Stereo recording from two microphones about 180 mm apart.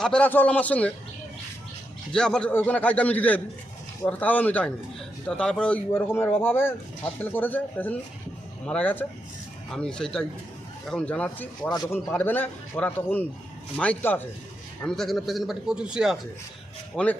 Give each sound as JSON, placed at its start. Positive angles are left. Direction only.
{"t": 0.0, "sound": "speech", "side_deg": 5}
{"t": 2.1, "sound": "a man's voice", "side_deg": 5}
{"t": 11.7, "sound": "speech", "side_deg": 25}
{"t": 12.1, "sound": "a man's voice", "side_deg": 10}